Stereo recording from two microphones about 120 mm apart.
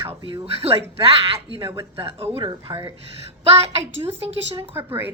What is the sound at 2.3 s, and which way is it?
Speech, 40° right (ahead or behind).